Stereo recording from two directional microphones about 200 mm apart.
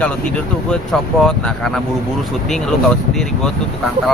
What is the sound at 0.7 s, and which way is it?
Speech, 5° left (ahead or behind).